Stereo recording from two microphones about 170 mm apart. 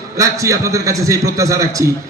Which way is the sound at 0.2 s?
20° right (ahead or behind).